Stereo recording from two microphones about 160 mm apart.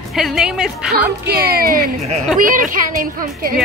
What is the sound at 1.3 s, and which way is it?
A woman's voice, 70° right (ahead or behind).